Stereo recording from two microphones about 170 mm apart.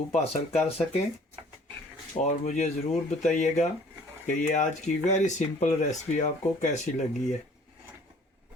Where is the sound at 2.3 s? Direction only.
45° left (ahead or behind).